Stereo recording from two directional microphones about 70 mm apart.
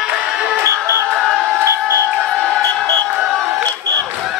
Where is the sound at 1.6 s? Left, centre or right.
Right.